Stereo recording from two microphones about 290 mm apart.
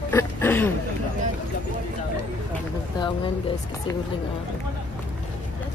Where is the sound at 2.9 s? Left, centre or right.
Centre.